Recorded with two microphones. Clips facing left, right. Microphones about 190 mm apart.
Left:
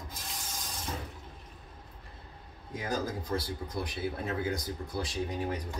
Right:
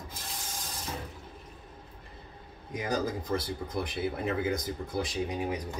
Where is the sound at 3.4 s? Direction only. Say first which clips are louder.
Right 2 dB; 20° right (ahead or behind).